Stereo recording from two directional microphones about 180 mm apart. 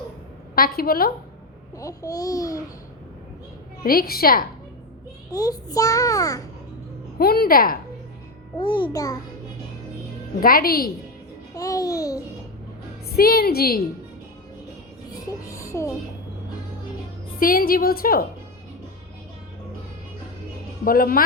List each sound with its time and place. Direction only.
0.5 s a woman's voice: 55° left (ahead or behind)
1.8 s a child's voice: 20° left (ahead or behind)
3.8 s a woman's voice: 55° left (ahead or behind)
5.3 s a child's voice: 20° left (ahead or behind)
7.2 s a woman's voice: 55° left (ahead or behind)
8.5 s a child's voice: 25° left (ahead or behind)
10.4 s a woman's voice: 55° left (ahead or behind)
11.5 s a child's voice: 20° left (ahead or behind)
13.1 s a woman's voice: 55° left (ahead or behind)
15.1 s speech: 20° left (ahead or behind)
17.4 s a woman's voice: 50° left (ahead or behind)
20.8 s a woman's voice: 55° left (ahead or behind)